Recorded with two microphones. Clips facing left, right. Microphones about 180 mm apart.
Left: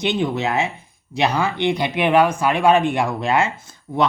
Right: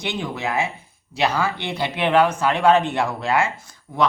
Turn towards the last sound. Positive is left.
turn(degrees=25)  # may be behind; listen again after turning